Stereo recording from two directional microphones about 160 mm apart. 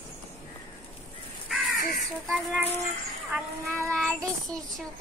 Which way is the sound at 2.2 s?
Centre (ahead or behind).